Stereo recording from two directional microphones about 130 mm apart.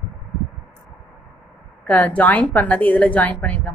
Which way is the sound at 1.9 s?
10° left (ahead or behind).